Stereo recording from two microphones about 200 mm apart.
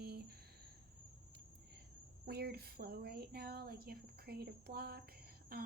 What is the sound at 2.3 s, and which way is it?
A woman's voice, 50° right (ahead or behind).